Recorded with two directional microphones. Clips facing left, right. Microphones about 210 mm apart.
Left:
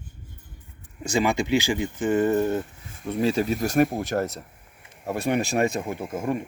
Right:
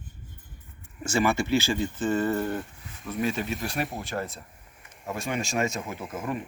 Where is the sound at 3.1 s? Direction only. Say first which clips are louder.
Left 6 dB; 30° left (ahead or behind).